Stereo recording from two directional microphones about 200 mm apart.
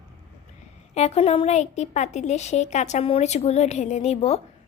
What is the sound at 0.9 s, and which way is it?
Speech, 35° left (ahead or behind).